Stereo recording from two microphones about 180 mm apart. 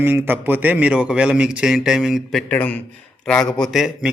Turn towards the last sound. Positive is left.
turn(degrees=0)  # may be behind; listen again after turning